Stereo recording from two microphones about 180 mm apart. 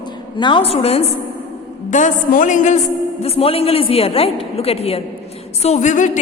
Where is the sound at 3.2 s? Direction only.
35° left (ahead or behind).